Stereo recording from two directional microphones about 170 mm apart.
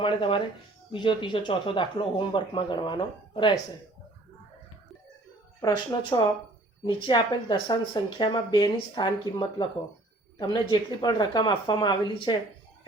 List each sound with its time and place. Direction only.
0.0 s speech: 30° left (ahead or behind)
5.5 s speech: 25° left (ahead or behind)